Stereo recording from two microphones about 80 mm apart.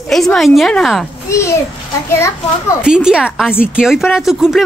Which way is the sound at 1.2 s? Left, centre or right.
Left.